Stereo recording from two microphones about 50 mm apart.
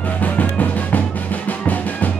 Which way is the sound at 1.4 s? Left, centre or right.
Left.